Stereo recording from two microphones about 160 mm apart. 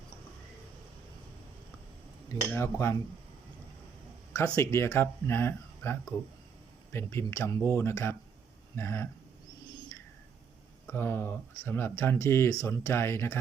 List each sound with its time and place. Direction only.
2.5 s speech: 15° left (ahead or behind)
4.4 s speech: 15° left (ahead or behind)
10.8 s speech: 15° left (ahead or behind)